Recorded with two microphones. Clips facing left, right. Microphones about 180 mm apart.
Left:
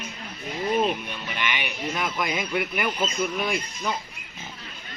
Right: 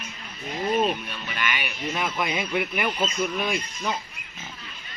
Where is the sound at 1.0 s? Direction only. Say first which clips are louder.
Even; 20° left (ahead or behind).